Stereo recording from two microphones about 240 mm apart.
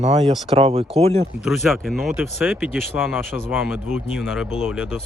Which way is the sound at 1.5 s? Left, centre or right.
Centre.